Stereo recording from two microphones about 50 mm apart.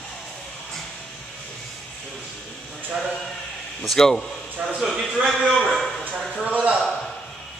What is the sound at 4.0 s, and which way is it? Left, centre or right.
Speech, centre.